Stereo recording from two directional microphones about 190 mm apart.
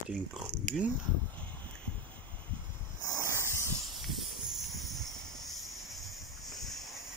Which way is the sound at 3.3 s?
15° left (ahead or behind).